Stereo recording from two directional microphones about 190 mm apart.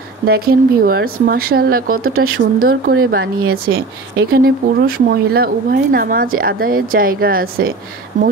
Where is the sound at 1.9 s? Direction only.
90° right.